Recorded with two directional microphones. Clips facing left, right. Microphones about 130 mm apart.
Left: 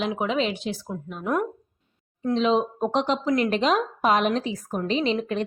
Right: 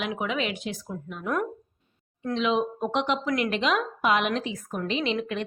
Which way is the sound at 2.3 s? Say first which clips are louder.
Left 3 dB; 35° left (ahead or behind).